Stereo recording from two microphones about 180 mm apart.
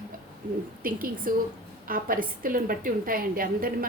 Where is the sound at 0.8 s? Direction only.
50° right (ahead or behind).